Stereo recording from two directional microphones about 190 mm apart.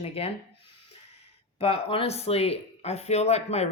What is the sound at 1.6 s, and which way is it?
Speech, 30° left (ahead or behind).